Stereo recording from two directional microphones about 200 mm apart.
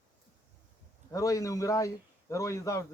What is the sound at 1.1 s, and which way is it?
Speech, 15° left (ahead or behind).